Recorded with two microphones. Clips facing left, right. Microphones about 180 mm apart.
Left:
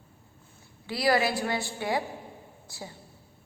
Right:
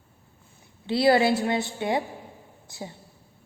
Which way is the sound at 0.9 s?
25° right (ahead or behind).